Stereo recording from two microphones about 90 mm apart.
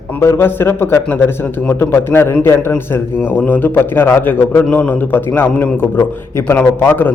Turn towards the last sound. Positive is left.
turn(degrees=20)  # may be behind; listen again after turning